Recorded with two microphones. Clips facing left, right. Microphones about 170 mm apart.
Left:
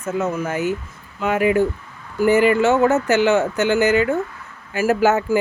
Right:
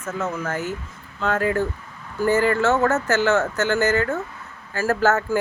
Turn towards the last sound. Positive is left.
turn(degrees=15)  # may be behind; listen again after turning